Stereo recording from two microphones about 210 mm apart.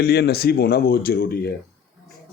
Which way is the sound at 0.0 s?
50° left (ahead or behind).